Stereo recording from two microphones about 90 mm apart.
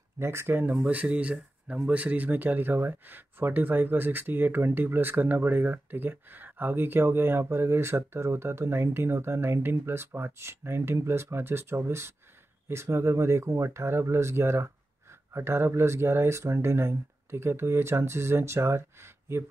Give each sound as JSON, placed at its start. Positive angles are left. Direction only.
{"t": 0.2, "sound": "speech", "side_deg": -30}